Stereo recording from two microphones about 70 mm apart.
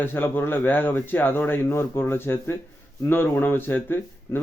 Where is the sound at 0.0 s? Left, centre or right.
Left.